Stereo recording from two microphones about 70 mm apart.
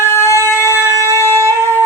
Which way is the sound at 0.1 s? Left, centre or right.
Left.